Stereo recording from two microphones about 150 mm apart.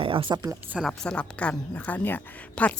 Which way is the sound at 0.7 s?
Centre (ahead or behind).